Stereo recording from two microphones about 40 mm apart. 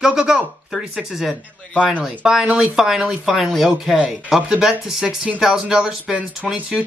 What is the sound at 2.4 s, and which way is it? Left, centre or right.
Speech, right.